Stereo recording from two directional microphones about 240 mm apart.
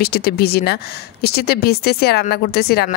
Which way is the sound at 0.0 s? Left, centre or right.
Left.